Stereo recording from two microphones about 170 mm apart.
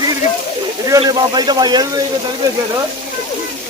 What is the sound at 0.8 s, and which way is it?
Speech, 25° right (ahead or behind).